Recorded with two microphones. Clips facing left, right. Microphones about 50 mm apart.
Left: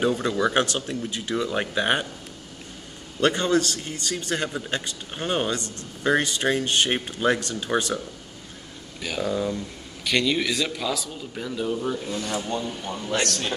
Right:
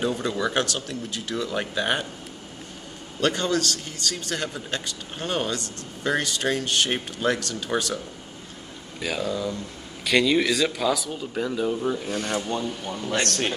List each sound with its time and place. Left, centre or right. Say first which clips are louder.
0.0 s speech: left 3 dB; centre
3.2 s speech: left 2 dB; left
9.2 s speech: left 4 dB; centre
10.0 s speech: right 3 dB; centre
11.3 s speech: right 3 dB; centre
11.7 s speech: right 1 dB; centre
12.1 s speech: right 1 dB; right
12.4 s speech: right 1 dB; centre
12.6 s speech: right 1 dB; centre
13.2 s speech: right 3 dB; right